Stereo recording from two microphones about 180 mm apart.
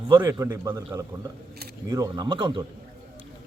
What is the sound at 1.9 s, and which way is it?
Speech, 20° right (ahead or behind).